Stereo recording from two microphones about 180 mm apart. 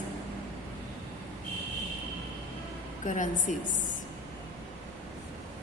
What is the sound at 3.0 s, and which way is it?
Speech, 45° left (ahead or behind).